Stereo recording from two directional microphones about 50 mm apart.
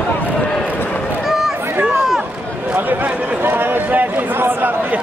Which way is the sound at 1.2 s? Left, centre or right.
Centre.